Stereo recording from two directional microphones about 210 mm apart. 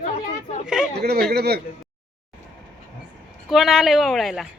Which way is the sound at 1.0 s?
50° right (ahead or behind).